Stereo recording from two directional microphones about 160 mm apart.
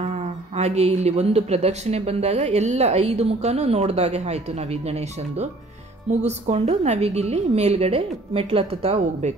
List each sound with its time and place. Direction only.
0.6 s speech: 40° right (ahead or behind)